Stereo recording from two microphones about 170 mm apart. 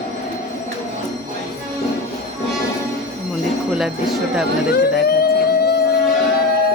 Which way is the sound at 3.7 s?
5° right (ahead or behind).